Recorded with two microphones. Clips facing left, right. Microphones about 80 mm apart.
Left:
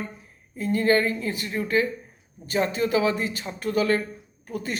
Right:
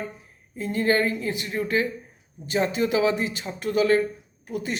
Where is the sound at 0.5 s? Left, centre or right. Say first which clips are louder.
Left 1 dB; right.